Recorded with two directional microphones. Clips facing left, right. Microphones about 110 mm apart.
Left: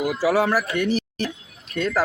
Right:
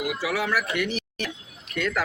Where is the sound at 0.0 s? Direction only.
40° left (ahead or behind).